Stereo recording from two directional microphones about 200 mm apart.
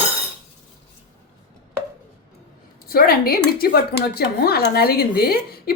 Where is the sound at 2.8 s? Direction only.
50° left (ahead or behind).